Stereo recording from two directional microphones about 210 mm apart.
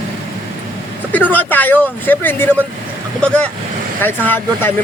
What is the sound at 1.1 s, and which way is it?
Speech, 10° left (ahead or behind).